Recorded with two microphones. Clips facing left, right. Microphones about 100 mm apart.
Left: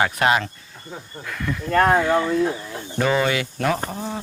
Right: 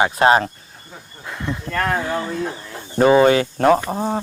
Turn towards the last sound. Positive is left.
turn(degrees=-50)  # may be behind; listen again after turning